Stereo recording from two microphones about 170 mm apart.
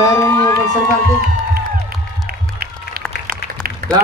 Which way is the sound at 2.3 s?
60° right (ahead or behind).